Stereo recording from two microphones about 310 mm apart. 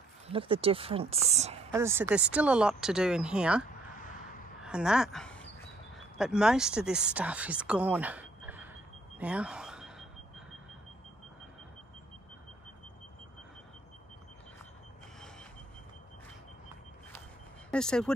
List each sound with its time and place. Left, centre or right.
0.3 s a woman's voice: centre
1.7 s speech: centre
4.6 s speech: centre
9.2 s a sound: centre
17.6 s speech: centre